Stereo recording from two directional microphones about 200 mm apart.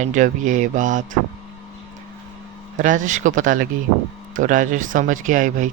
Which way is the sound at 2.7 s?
40° right (ahead or behind).